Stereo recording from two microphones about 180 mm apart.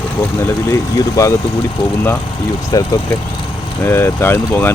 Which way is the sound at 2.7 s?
20° left (ahead or behind).